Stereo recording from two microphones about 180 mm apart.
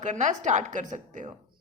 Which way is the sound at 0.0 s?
40° right (ahead or behind).